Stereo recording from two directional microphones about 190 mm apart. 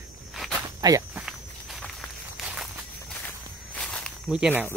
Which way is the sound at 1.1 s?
Centre (ahead or behind).